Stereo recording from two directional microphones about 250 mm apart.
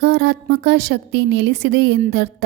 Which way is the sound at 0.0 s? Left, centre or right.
Right.